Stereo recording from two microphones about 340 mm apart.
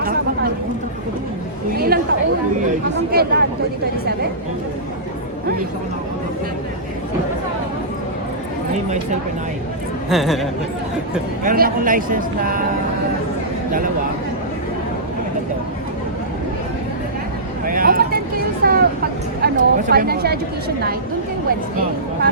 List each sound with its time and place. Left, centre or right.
0.0 s a sound: right
1.7 s chatter: right
3.1 s a man's voice: right
10.1 s speech: centre
11.4 s a man's voice: right
17.7 s vehicle: right
19.4 s a sound: right